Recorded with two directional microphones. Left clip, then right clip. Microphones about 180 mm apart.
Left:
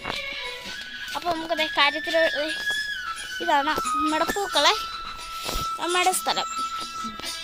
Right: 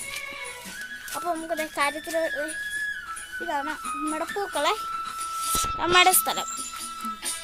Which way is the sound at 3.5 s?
30° left (ahead or behind).